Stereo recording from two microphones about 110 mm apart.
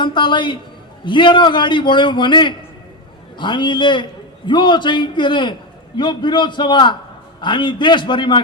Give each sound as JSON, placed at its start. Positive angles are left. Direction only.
{"t": 0.0, "sound": "a man's voice", "side_deg": 45}